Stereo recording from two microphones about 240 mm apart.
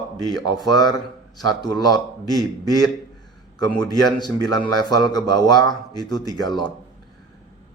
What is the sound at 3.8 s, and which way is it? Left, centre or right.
Speech, centre.